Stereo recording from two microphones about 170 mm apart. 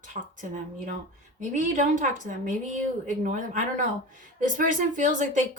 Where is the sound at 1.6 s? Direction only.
50° right (ahead or behind).